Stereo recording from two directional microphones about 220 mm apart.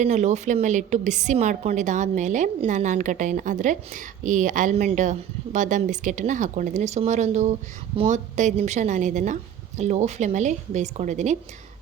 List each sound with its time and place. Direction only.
0.0 s a woman's voice: 30° right (ahead or behind)